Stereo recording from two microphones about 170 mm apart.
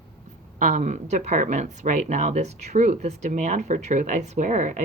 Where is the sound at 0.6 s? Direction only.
50° right (ahead or behind).